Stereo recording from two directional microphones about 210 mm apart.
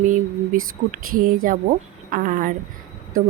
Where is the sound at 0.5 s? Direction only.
40° right (ahead or behind).